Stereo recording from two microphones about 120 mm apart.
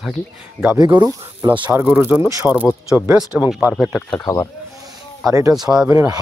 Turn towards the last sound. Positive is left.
turn(degrees=-25)  # may be behind; listen again after turning